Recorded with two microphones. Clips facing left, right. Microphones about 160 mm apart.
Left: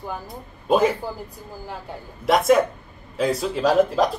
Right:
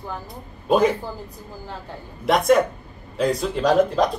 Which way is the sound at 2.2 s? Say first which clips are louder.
Even; centre (ahead or behind).